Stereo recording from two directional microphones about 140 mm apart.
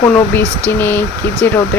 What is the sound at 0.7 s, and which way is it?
Speech, 15° left (ahead or behind).